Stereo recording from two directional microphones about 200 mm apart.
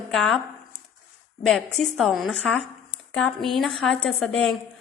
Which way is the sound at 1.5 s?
Centre (ahead or behind).